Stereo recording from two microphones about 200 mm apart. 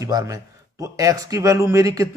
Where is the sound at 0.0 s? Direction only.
15° right (ahead or behind).